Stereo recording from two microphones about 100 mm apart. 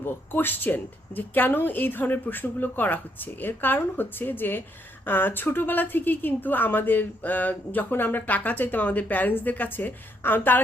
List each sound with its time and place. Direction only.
0.0 s a woman's voice: 20° left (ahead or behind)